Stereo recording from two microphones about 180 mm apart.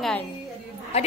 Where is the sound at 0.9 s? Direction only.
35° left (ahead or behind).